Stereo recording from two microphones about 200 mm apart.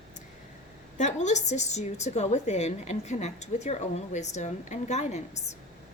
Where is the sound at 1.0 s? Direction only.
35° left (ahead or behind).